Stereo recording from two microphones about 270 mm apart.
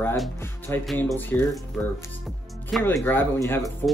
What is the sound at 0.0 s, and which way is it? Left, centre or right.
Speech, centre.